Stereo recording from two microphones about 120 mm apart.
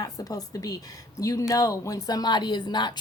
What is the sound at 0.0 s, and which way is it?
Speech, 30° left (ahead or behind).